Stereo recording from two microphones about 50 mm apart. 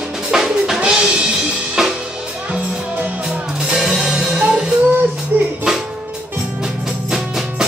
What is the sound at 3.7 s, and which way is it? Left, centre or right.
Music, centre.